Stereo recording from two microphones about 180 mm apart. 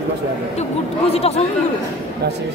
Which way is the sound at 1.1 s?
35° left (ahead or behind).